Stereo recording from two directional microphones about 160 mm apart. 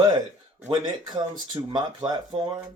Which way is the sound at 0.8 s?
30° right (ahead or behind).